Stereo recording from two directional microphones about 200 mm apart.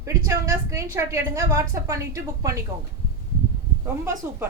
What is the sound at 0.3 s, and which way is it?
A woman's voice, 15° right (ahead or behind).